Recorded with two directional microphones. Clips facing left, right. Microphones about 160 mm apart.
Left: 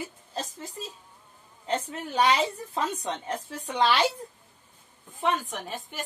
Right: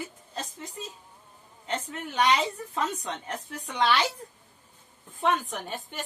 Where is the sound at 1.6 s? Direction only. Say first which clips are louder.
Left 3 dB; 30° left (ahead or behind).